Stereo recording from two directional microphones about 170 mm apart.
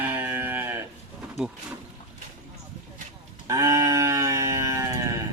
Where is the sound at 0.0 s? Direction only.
10° right (ahead or behind).